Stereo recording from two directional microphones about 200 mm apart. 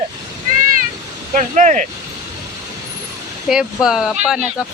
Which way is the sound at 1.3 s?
40° right (ahead or behind).